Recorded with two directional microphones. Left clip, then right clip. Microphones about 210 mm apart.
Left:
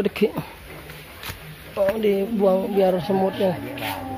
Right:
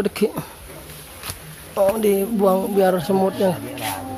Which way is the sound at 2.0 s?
15° right (ahead or behind).